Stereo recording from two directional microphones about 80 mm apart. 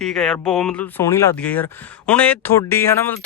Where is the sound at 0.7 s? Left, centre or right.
Centre.